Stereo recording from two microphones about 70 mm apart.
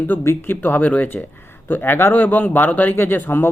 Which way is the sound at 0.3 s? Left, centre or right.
Left.